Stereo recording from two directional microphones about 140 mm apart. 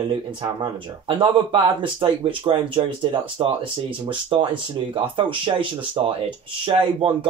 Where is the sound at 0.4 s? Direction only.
35° right (ahead or behind).